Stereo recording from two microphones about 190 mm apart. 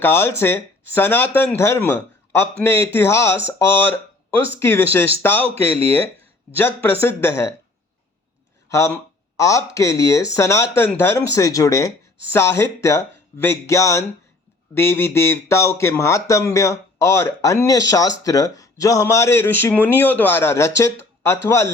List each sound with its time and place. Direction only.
0.0 s a man's voice: 10° left (ahead or behind)
6.6 s a man's voice: 10° left (ahead or behind)
8.7 s a man's voice: 15° left (ahead or behind)